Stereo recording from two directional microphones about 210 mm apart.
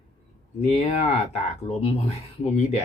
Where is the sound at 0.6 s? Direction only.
30° left (ahead or behind).